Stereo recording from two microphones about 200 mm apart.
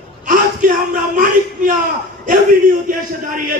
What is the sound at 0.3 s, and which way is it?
Speech, 40° right (ahead or behind).